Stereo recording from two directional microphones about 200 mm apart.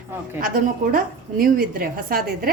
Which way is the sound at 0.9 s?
45° right (ahead or behind).